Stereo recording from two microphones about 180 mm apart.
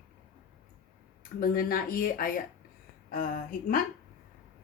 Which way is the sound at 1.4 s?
55° left (ahead or behind).